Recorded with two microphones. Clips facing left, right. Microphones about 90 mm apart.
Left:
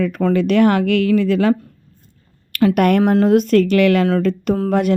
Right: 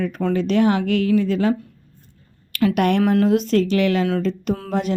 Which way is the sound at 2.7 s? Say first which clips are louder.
Left 3 dB; 50° left (ahead or behind).